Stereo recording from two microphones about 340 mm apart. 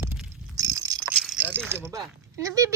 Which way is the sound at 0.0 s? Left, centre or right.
Centre.